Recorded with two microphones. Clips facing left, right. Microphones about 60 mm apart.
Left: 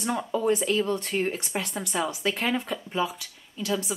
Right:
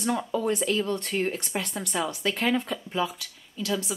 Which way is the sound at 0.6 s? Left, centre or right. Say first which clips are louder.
Left 1 dB; centre.